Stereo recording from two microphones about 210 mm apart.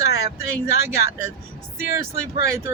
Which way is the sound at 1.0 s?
50° left (ahead or behind).